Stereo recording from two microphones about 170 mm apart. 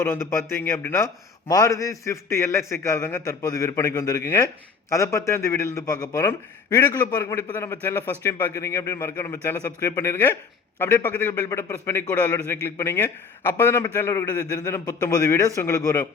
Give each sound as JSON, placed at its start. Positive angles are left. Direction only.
{"t": 0.0, "sound": "a man's voice", "side_deg": 15}